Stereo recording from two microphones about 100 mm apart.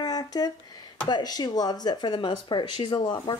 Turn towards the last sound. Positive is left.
turn(degrees=45)  # may be behind; listen again after turning